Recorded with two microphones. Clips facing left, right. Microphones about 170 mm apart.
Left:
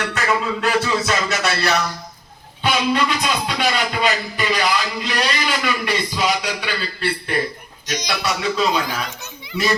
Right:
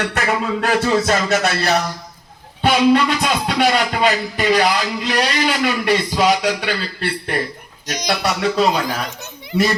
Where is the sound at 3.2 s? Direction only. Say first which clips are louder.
Right 4 dB; 55° right (ahead or behind).